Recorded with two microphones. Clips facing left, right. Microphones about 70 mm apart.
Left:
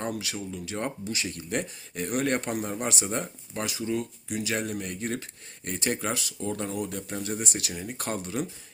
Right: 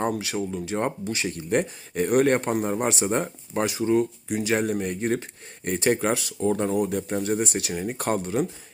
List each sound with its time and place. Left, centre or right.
0.2 s speech: right
2.2 s speech: right
6.4 s speech: right